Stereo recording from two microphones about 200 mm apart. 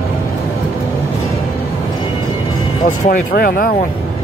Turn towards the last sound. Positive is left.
turn(degrees=45)  # may be behind; listen again after turning